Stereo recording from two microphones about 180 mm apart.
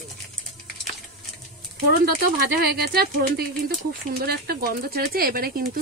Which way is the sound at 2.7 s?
60° right (ahead or behind).